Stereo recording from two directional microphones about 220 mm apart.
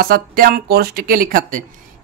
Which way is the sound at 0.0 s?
40° right (ahead or behind).